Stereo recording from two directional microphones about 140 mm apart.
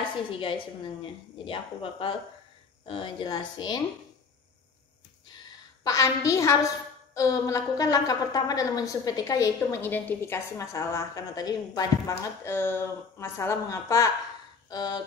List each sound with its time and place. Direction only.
0.3 s a woman's voice: 40° left (ahead or behind)
5.9 s a woman's voice: 20° left (ahead or behind)
14.7 s a sound: 25° left (ahead or behind)